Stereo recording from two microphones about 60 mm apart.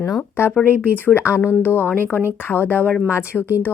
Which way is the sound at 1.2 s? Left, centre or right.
Left.